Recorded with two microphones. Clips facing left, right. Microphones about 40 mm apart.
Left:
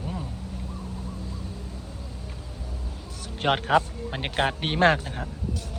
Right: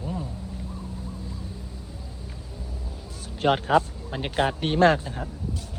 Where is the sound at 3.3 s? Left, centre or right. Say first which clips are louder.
Right 1 dB; left.